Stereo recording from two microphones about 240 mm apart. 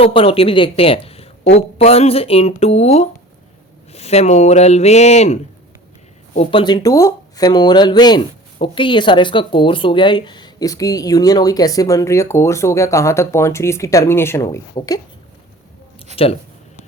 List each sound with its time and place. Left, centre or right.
0.0 s speech: left
16.1 s speech: left